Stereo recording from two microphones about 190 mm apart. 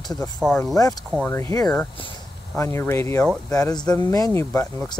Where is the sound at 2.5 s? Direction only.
15° left (ahead or behind).